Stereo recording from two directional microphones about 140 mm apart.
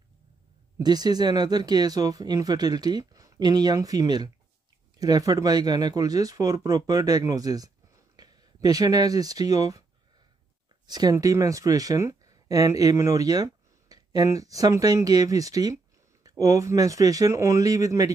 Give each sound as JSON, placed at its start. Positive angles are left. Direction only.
{"t": 0.7, "sound": "speech", "side_deg": -30}
{"t": 10.9, "sound": "speech", "side_deg": -25}